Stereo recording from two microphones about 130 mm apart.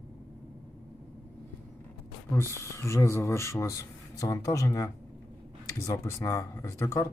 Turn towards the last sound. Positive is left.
turn(degrees=25)  # may be behind; listen again after turning